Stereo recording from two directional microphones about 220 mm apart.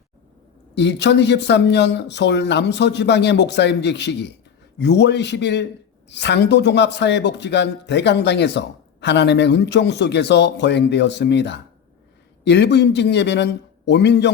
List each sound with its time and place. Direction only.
0.8 s speech: 50° left (ahead or behind)